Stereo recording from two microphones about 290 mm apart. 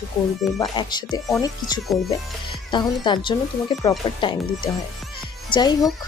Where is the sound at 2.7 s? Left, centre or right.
Centre.